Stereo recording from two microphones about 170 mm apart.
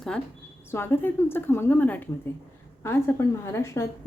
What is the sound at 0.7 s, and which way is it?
Speech, 15° left (ahead or behind).